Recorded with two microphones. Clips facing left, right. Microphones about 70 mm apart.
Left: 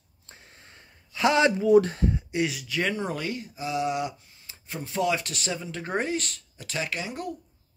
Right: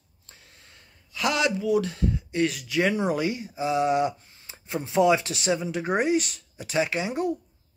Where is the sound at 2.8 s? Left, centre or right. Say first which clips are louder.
Right 5 dB; centre; by 4.5 s right.